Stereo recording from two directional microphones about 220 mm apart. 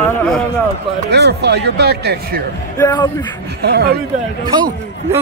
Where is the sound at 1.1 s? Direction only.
50° right (ahead or behind).